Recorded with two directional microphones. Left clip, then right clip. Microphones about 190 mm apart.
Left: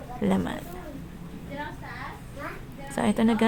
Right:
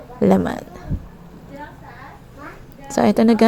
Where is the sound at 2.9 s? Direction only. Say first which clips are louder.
Right 10 dB; 35° right (ahead or behind).